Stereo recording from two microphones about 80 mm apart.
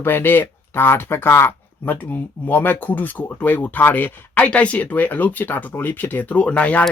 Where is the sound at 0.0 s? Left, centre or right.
Left.